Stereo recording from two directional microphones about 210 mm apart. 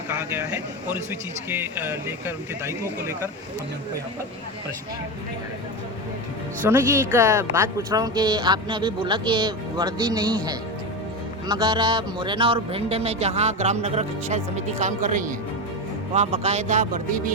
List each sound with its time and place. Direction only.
0.1 s a sound: 10° right (ahead or behind)
1.5 s speech: 10° right (ahead or behind)
6.7 s a man's voice: 10° right (ahead or behind); by 17.3 s 35° right (ahead or behind)